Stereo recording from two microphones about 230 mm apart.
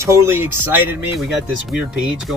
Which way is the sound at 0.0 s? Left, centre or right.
Centre.